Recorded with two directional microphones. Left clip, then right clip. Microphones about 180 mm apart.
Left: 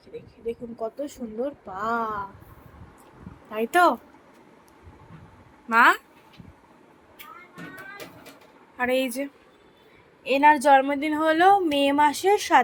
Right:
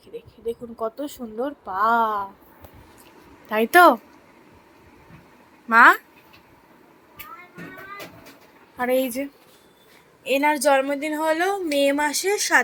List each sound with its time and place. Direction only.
0.4 s speech: 20° right (ahead or behind)
3.5 s speech: 20° right (ahead or behind)
5.6 s speech: 10° right (ahead or behind)
8.8 s speech: 5° right (ahead or behind)
10.2 s a woman's voice: 5° left (ahead or behind)